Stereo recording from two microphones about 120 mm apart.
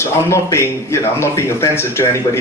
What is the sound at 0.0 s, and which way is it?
A man's voice, 25° left (ahead or behind).